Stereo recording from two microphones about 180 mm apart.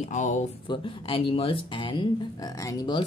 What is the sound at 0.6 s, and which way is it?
Speech, 25° left (ahead or behind).